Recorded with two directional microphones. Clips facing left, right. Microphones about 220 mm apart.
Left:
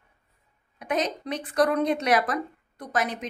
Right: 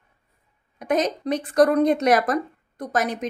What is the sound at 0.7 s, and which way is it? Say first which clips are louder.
A woman's voice: right 5 dB; 45° right (ahead or behind).